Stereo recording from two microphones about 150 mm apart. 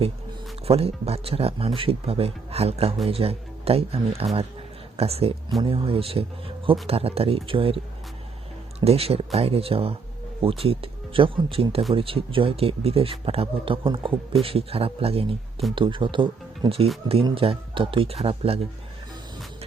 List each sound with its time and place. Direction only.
0.6 s speech: 40° right (ahead or behind)
8.8 s speech: 40° right (ahead or behind)